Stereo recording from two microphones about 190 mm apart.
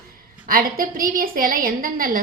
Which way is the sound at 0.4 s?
50° right (ahead or behind).